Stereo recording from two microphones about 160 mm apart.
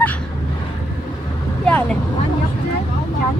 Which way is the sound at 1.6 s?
5° left (ahead or behind).